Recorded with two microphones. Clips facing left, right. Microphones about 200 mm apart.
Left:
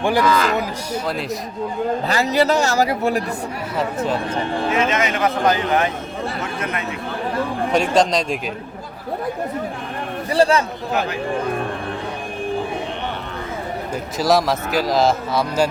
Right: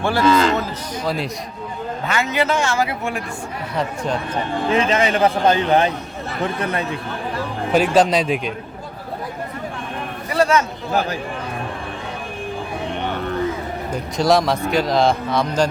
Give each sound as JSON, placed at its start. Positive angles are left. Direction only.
{"t": 0.2, "sound": "a man's voice", "side_deg": -25}
{"t": 2.0, "sound": "a man's voice", "side_deg": 35}
{"t": 3.8, "sound": "a man's voice", "side_deg": 5}
{"t": 4.8, "sound": "a man's voice", "side_deg": -30}
{"t": 7.7, "sound": "a man's voice", "side_deg": -5}
{"t": 10.3, "sound": "a man's voice", "side_deg": 30}
{"t": 13.9, "sound": "a man's voice", "side_deg": 5}